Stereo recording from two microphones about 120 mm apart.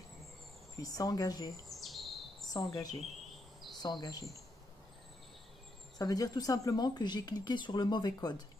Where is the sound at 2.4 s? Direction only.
30° left (ahead or behind).